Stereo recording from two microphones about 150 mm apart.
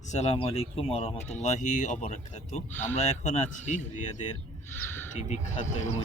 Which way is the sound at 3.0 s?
45° left (ahead or behind).